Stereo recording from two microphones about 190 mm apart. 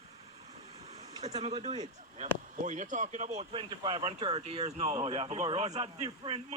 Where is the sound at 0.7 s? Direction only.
35° right (ahead or behind).